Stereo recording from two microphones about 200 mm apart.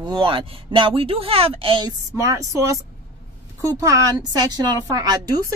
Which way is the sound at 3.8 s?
15° right (ahead or behind).